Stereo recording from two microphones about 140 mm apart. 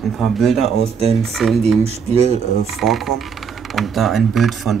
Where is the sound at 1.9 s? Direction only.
50° right (ahead or behind).